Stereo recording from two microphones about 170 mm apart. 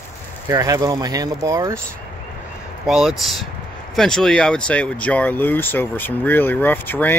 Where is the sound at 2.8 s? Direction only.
Centre (ahead or behind).